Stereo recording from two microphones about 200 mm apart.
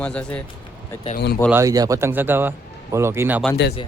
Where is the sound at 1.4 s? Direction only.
15° right (ahead or behind).